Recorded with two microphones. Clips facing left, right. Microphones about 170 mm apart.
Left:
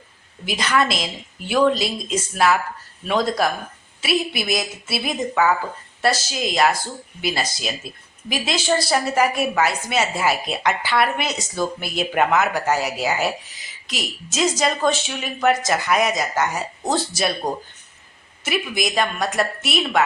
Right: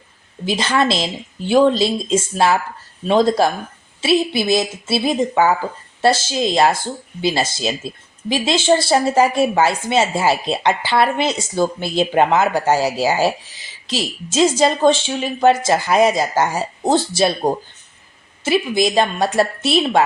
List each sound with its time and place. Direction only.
0.4 s speech: 30° right (ahead or behind)